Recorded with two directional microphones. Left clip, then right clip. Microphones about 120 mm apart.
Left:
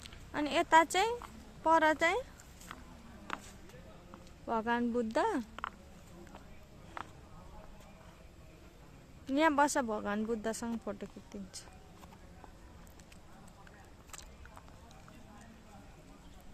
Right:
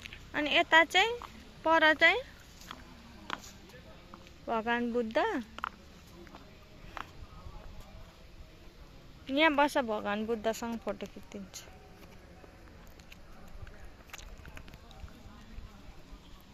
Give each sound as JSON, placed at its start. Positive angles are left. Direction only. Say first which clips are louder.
{"t": 0.3, "sound": "speech", "louder": "right 2 dB", "side_deg": 20}
{"t": 1.6, "sound": "speech", "louder": "right 4 dB", "side_deg": 15}
{"t": 4.4, "sound": "speech", "louder": "right 2 dB", "side_deg": 15}
{"t": 9.2, "sound": "speech", "louder": "right 2 dB", "side_deg": 20}
{"t": 10.8, "sound": "speech", "louder": "right 4 dB", "side_deg": 10}